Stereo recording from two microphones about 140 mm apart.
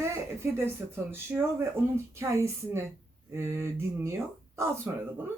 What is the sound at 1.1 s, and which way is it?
Speech, 15° right (ahead or behind).